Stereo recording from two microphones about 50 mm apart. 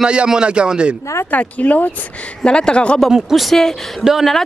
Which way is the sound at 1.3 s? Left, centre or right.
Left.